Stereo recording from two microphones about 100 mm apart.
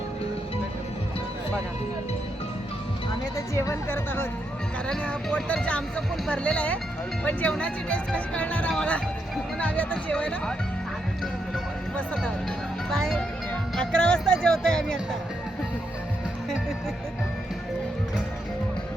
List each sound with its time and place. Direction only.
3.3 s speech: 30° left (ahead or behind); by 10.5 s 10° left (ahead or behind)
11.9 s speech: 10° left (ahead or behind)
12.9 s music: 5° left (ahead or behind)
13.7 s speech: 10° left (ahead or behind)